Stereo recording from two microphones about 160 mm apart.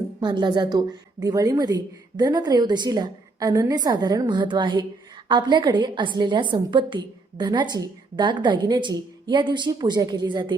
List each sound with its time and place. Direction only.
0.2 s a woman's voice: 25° right (ahead or behind)